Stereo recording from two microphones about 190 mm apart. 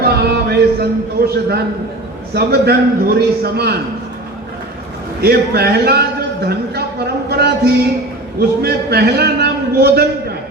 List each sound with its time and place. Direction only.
0.0 s a sound: 55° right (ahead or behind)
2.3 s a man's voice: 55° right (ahead or behind)
5.2 s a man's voice: 55° right (ahead or behind)
7.3 s music: 55° right (ahead or behind)
8.4 s a man's voice: 55° right (ahead or behind)